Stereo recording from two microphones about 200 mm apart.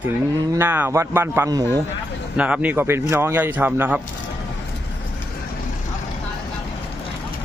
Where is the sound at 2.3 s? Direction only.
5° right (ahead or behind).